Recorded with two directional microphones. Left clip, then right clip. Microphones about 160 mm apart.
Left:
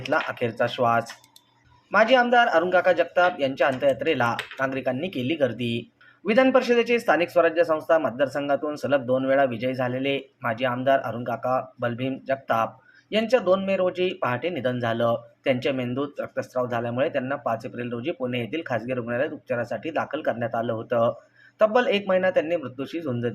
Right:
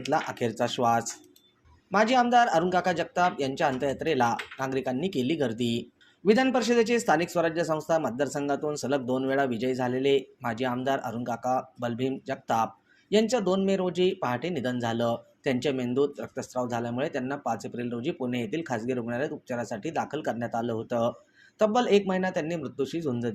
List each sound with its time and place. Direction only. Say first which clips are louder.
0.0 s a man's voice: left 3 dB; 40° right (ahead or behind)